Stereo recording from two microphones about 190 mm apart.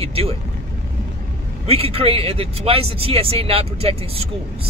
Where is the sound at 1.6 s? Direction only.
30° right (ahead or behind).